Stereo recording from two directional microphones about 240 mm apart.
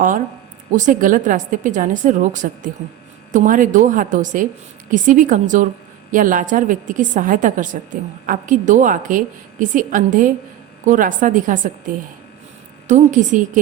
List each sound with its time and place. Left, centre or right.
0.7 s a woman's voice: right
12.9 s a woman's voice: right